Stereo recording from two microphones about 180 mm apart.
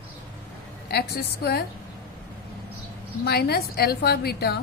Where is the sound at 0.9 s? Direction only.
65° left (ahead or behind).